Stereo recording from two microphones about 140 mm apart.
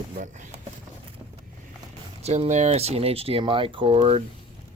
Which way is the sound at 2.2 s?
50° right (ahead or behind).